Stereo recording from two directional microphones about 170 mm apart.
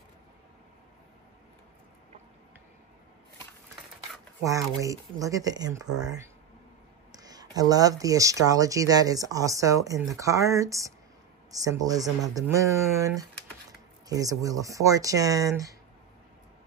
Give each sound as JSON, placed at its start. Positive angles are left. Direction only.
{"t": 4.4, "sound": "speech", "side_deg": -20}